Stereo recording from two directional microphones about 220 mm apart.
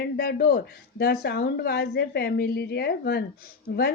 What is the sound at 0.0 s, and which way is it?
Speech, 45° left (ahead or behind).